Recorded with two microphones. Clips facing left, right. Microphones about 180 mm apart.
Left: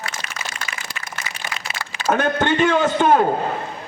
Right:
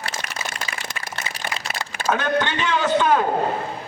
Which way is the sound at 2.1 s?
50° left (ahead or behind).